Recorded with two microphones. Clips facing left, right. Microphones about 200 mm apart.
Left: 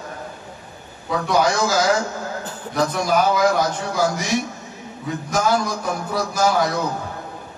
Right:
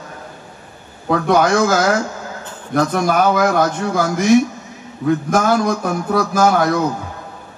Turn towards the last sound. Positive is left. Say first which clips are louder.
# right 5 dB
turn(degrees=-55)  # may be behind; listen again after turning